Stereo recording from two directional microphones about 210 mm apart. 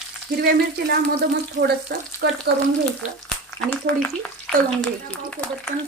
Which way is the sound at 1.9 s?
50° right (ahead or behind).